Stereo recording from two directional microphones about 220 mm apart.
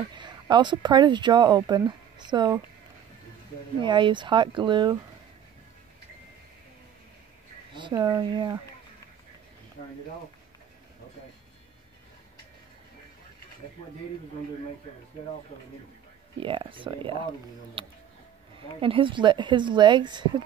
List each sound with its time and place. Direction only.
0.1 s a woman's voice: 20° right (ahead or behind)
3.8 s speech: 20° right (ahead or behind)
7.7 s speech: 20° right (ahead or behind)
16.3 s speech: 25° right (ahead or behind)